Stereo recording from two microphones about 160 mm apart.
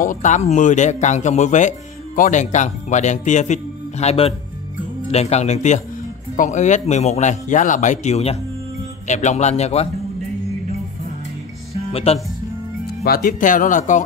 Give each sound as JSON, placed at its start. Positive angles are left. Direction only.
{"t": 0.0, "sound": "speech", "side_deg": 55}
{"t": 11.7, "sound": "music", "side_deg": 40}
{"t": 13.0, "sound": "speech", "side_deg": 65}